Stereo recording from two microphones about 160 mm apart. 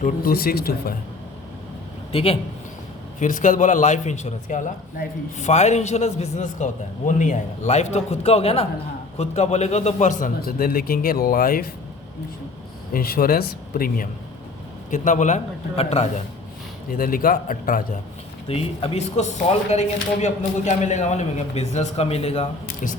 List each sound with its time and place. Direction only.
0.0 s speech: 70° left (ahead or behind)
2.1 s a man's voice: 35° left (ahead or behind)
3.2 s a man's voice: 50° left (ahead or behind)
12.9 s a man's voice: 65° left (ahead or behind)
14.8 s a man's voice: 50° left (ahead or behind)
16.9 s a man's voice: 65° left (ahead or behind)
18.4 s a man's voice: 40° left (ahead or behind)